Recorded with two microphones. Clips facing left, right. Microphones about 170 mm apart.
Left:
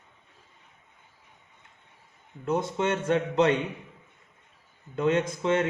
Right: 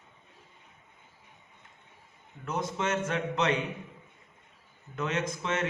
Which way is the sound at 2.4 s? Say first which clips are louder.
Left 5 dB; 30° left (ahead or behind).